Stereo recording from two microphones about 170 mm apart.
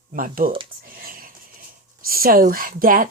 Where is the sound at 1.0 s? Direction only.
55° right (ahead or behind).